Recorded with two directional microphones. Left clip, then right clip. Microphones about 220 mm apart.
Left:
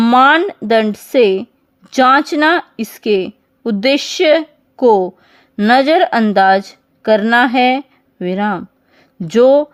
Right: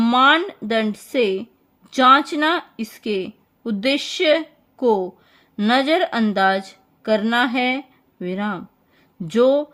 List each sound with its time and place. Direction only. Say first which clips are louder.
0.0 s speech: left 6 dB; 25° left (ahead or behind)